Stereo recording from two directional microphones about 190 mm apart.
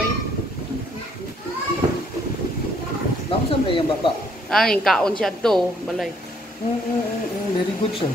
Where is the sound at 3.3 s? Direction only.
25° left (ahead or behind).